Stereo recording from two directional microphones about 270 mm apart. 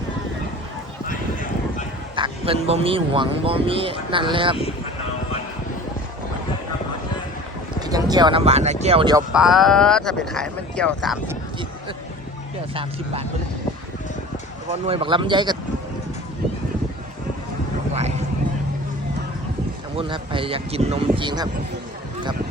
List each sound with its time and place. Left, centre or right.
2.1 s speech: centre
7.8 s speech: centre
9.3 s speech: centre
14.7 s speech: right
20.0 s speech: centre